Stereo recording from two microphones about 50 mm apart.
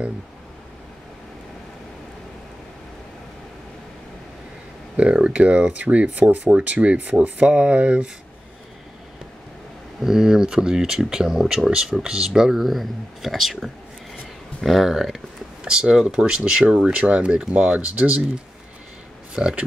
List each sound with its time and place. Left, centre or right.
4.9 s speech: right
9.9 s speech: centre
15.6 s speech: centre
19.3 s a man's voice: centre